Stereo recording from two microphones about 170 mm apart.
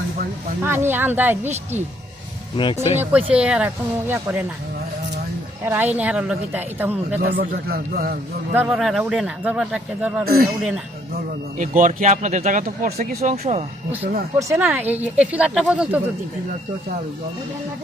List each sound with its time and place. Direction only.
0.6 s speech: 15° right (ahead or behind)
2.9 s speech: 10° right (ahead or behind)
5.6 s speech: 10° right (ahead or behind)
7.2 s a man's voice: 60° right (ahead or behind)
8.5 s speech: 5° right (ahead or behind)
10.2 s a man's voice: 60° right (ahead or behind)
11.1 s speech: 50° right (ahead or behind)
13.3 s speech: 40° right (ahead or behind)
14.3 s speech: 15° right (ahead or behind)